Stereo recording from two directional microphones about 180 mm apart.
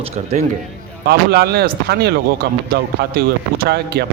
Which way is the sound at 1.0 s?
60° right (ahead or behind).